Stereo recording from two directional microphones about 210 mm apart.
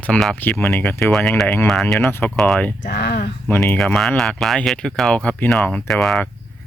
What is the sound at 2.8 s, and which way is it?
Speech, 50° left (ahead or behind).